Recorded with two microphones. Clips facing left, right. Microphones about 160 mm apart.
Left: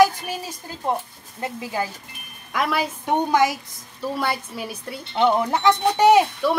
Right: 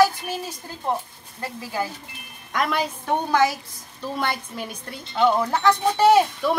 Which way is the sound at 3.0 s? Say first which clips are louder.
Left 1 dB; 15° left (ahead or behind).